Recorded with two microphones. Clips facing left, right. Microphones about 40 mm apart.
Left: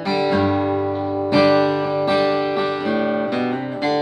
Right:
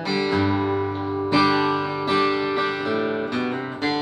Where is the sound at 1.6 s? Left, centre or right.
Centre.